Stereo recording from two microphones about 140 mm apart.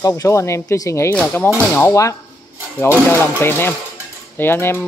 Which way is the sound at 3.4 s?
15° left (ahead or behind).